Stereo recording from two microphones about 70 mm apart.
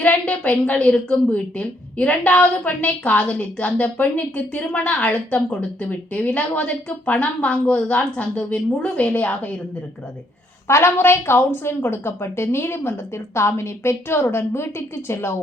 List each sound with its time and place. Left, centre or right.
0.0 s a woman's voice: centre
10.7 s a woman's voice: left